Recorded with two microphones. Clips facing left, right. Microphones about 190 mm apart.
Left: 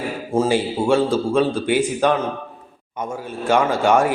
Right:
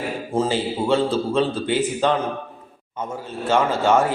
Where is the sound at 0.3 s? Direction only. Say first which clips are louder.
Left 4 dB; 10° left (ahead or behind).